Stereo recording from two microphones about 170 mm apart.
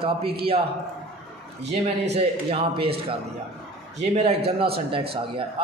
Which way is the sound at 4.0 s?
40° right (ahead or behind).